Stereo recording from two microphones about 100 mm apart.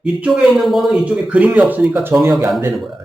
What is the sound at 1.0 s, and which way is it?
Speech, 15° right (ahead or behind).